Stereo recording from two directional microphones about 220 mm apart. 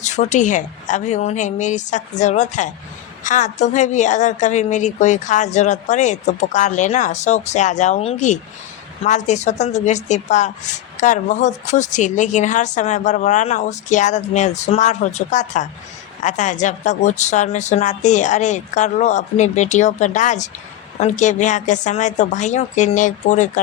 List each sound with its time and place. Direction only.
0.0 s a woman's voice: 35° left (ahead or behind)